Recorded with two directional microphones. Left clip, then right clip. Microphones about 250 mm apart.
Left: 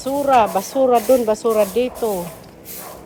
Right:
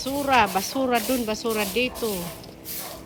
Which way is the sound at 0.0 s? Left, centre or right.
Centre.